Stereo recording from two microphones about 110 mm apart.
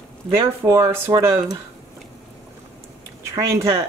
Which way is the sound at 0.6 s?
25° right (ahead or behind).